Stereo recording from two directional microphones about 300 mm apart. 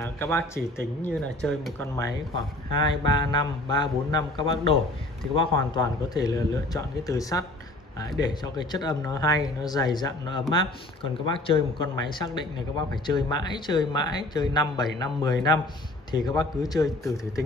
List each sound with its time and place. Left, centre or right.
0.0 s speech: centre